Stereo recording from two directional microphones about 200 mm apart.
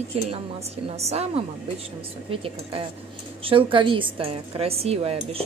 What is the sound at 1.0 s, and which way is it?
Speech, 30° right (ahead or behind).